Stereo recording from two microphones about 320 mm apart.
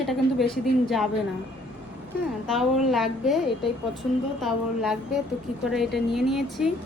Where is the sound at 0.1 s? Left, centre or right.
Centre.